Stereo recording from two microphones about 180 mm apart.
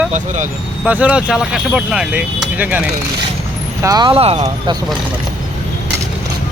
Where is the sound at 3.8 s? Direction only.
20° right (ahead or behind).